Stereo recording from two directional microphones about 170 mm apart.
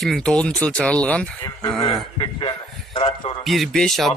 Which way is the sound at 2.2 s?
30° left (ahead or behind).